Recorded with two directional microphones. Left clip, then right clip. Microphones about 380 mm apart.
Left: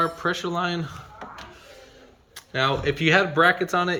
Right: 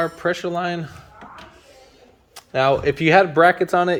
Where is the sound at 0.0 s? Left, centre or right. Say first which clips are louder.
Right 2 dB; centre.